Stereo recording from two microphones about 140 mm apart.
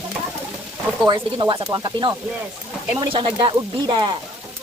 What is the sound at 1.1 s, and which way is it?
Speech, 40° right (ahead or behind).